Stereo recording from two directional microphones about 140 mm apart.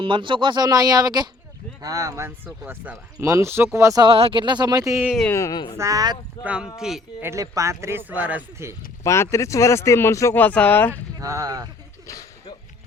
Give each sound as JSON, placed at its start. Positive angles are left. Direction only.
{"t": 0.0, "sound": "speech", "side_deg": -35}
{"t": 4.0, "sound": "speech", "side_deg": -40}
{"t": 5.3, "sound": "speech", "side_deg": 25}
{"t": 5.7, "sound": "speech", "side_deg": -20}
{"t": 6.4, "sound": "a man's voice", "side_deg": -10}
{"t": 7.2, "sound": "speech", "side_deg": -20}
{"t": 9.0, "sound": "speech", "side_deg": 20}
{"t": 11.2, "sound": "speech", "side_deg": -25}
{"t": 12.0, "sound": "a sound", "side_deg": 25}